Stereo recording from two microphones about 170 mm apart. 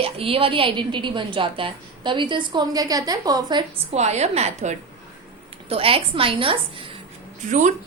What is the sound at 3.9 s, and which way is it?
A woman's voice, 40° right (ahead or behind).